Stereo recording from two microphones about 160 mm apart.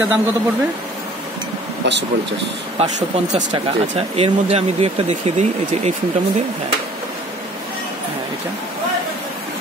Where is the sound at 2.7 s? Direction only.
45° right (ahead or behind).